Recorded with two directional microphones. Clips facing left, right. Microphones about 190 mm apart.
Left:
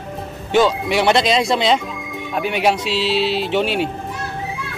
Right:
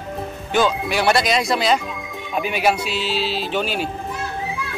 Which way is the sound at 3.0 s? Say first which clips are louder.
Left 7 dB; 70° left (ahead or behind).